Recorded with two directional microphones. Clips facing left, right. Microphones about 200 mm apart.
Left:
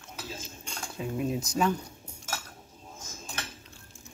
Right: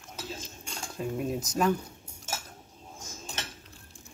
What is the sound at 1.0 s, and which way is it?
Speech, centre (ahead or behind).